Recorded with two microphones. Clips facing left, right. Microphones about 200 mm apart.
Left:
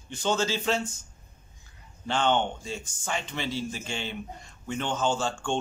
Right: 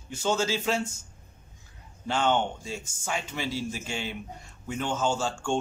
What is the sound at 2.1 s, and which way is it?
Speech, 10° right (ahead or behind).